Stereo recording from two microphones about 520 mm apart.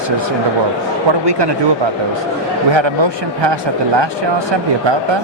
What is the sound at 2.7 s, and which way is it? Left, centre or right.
Speech, right.